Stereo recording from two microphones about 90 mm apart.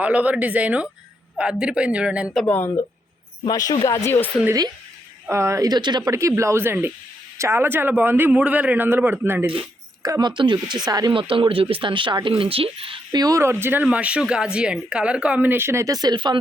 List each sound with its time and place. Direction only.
0.0 s speech: 15° right (ahead or behind)
2.5 s speech: 25° left (ahead or behind)
3.4 s speech: 50° left (ahead or behind)
5.3 s speech: 35° right (ahead or behind)
5.6 s speech: 50° right (ahead or behind)
6.1 s a man's voice: 35° right (ahead or behind)
10.0 s speech: 45° right (ahead or behind)
10.8 s speech: 45° right (ahead or behind)
11.1 s speech: 75° right (ahead or behind); by 13.0 s 90° right
13.1 s speech: 45° right (ahead or behind)
13.4 s a man's voice: 25° right (ahead or behind)
13.8 s speech: 15° right (ahead or behind)
15.9 s speech: 45° right (ahead or behind)
16.1 s speech: 60° right (ahead or behind)